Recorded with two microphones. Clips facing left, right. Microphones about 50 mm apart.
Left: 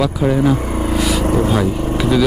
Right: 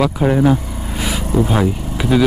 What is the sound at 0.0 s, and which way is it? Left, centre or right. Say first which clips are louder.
Speech: right 1 dB; centre.